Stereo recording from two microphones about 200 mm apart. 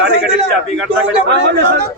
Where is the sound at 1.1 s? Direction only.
60° right (ahead or behind).